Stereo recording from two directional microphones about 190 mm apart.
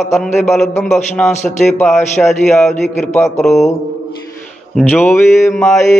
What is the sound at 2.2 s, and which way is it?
Mantra, 10° left (ahead or behind).